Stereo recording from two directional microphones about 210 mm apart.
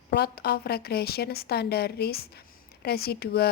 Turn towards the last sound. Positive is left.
turn(degrees=50)  # may be behind; listen again after turning